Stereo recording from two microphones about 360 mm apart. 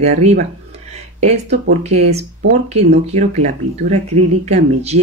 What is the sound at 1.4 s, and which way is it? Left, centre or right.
Speech, right.